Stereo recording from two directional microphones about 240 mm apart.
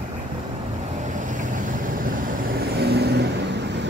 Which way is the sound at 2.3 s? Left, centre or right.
Right.